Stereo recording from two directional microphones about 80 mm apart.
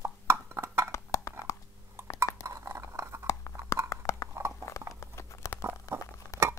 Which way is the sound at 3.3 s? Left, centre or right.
Left.